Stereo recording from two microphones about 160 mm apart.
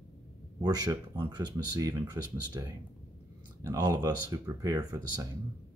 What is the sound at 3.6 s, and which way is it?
Speech, 25° right (ahead or behind).